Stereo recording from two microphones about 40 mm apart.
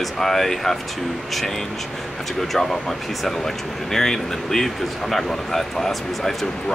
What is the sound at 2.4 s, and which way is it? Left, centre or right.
Speech, centre.